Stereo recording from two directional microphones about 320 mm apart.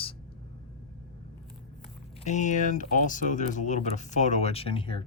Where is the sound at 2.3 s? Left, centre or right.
Left.